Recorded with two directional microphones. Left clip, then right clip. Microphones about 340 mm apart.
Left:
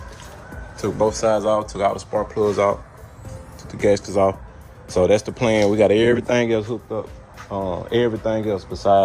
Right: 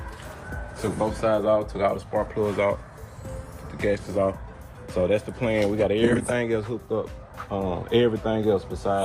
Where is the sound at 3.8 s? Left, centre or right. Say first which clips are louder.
Left 7 dB; centre.